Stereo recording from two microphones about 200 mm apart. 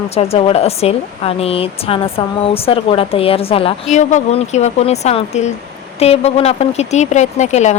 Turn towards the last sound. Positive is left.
turn(degrees=35)  # may be behind; listen again after turning